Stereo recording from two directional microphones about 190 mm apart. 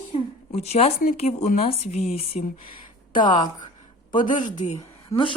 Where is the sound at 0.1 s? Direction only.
35° left (ahead or behind).